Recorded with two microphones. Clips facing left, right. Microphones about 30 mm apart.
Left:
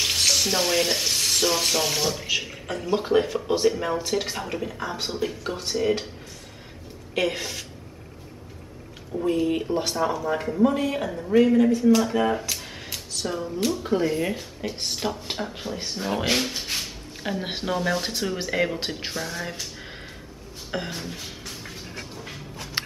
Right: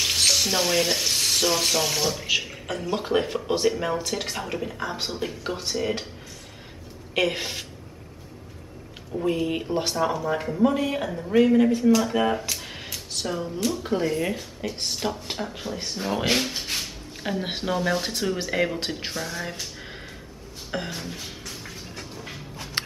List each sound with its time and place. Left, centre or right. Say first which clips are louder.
0.0 s frying: even; centre
2.2 s speech: right 1 dB; centre
7.3 s a woman's voice: right 1 dB; centre
9.2 s speech: left 2 dB; centre
20.7 s a sound: even; centre